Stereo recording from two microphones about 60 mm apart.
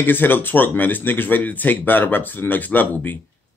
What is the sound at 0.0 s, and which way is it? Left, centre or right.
Speech, left.